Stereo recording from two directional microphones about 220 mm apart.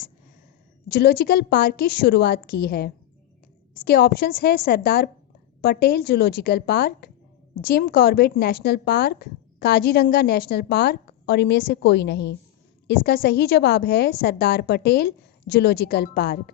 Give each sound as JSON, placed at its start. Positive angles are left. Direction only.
{"t": 0.9, "sound": "speech", "side_deg": 45}